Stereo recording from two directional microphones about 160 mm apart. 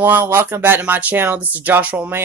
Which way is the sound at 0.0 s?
15° right (ahead or behind).